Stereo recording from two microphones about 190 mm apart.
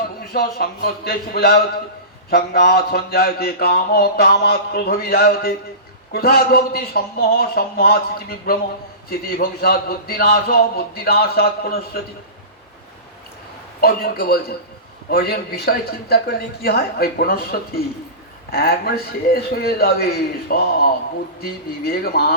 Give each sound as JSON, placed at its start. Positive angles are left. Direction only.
{"t": 0.3, "sound": "a man's voice", "side_deg": 55}
{"t": 13.8, "sound": "a man's voice", "side_deg": 55}